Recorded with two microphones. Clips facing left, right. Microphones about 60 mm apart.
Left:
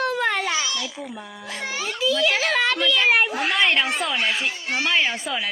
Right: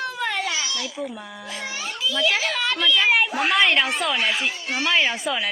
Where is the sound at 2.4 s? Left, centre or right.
Left.